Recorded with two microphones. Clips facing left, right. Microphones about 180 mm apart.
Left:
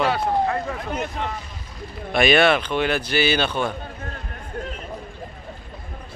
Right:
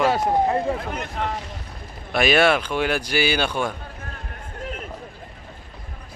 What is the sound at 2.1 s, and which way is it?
A man's voice, 5° right (ahead or behind).